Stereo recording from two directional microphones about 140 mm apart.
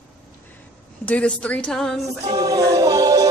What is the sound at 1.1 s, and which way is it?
A woman's voice, 10° left (ahead or behind).